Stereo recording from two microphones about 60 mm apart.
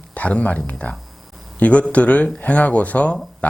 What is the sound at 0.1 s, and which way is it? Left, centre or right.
A man's voice, left.